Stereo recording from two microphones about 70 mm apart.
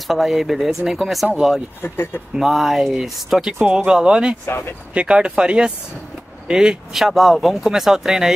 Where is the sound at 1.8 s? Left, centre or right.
Left.